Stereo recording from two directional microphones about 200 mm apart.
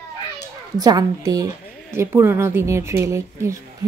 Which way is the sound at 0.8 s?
20° right (ahead or behind).